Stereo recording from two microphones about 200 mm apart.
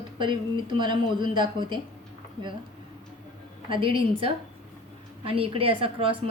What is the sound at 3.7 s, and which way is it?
Speech, 25° right (ahead or behind).